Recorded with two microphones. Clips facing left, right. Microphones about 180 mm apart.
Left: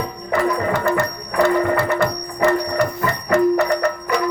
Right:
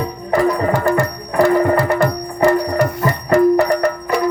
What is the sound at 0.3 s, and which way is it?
Music, 35° right (ahead or behind).